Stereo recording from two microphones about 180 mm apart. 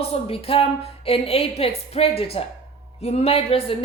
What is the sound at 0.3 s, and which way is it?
A woman's voice, 35° left (ahead or behind).